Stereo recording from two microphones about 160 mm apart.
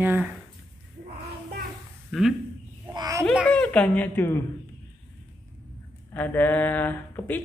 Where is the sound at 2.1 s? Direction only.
5° right (ahead or behind).